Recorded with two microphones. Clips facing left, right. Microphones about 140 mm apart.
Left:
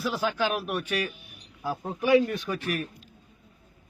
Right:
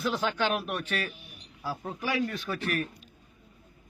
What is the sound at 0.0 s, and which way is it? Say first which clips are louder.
A man's voice: left 1 dB; 5° left (ahead or behind).